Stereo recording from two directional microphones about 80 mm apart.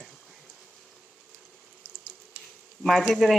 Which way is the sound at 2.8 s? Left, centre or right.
Centre.